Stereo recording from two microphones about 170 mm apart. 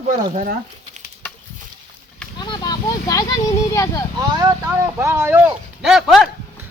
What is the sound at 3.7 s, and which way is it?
Speech, 20° left (ahead or behind).